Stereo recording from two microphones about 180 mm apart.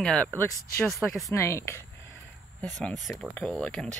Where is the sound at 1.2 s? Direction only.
15° left (ahead or behind).